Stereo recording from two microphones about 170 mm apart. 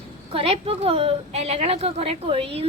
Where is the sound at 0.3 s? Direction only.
35° right (ahead or behind).